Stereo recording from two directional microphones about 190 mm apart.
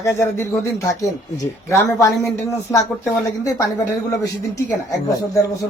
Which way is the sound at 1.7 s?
15° left (ahead or behind).